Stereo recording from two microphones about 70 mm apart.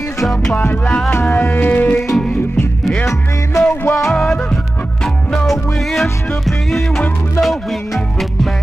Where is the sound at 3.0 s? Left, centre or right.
Left.